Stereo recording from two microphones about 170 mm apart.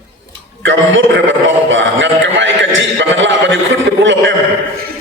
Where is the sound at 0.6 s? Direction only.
90° right.